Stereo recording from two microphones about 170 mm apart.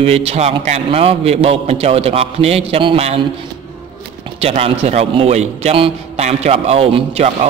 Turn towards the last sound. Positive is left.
turn(degrees=-35)  # may be behind; listen again after turning